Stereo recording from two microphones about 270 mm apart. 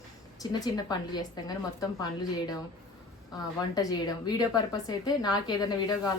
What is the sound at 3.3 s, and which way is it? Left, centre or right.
A woman's voice, centre.